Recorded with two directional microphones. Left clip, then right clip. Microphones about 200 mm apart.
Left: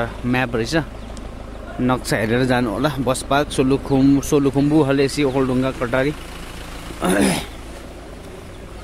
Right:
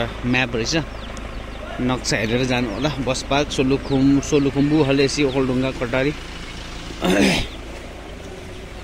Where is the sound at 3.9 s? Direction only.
25° left (ahead or behind); by 7.4 s 10° left (ahead or behind).